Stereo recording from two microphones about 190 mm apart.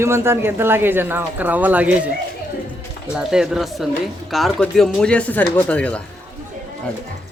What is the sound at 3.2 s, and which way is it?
Speech, 5° right (ahead or behind).